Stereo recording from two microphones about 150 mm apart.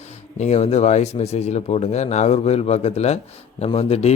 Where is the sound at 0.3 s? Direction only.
45° left (ahead or behind).